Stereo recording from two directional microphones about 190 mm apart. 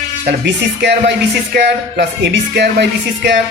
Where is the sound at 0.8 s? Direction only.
65° right (ahead or behind).